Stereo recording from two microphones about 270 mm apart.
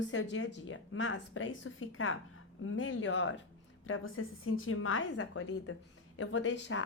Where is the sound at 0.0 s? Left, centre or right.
Left.